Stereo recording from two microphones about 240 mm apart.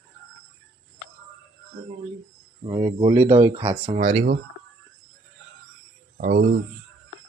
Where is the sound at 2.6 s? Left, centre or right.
Right.